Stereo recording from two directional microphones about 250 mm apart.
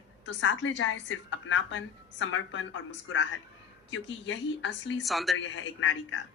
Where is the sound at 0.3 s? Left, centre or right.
Left.